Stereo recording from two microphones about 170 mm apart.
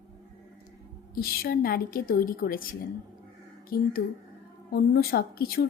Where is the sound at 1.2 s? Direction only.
65° left (ahead or behind).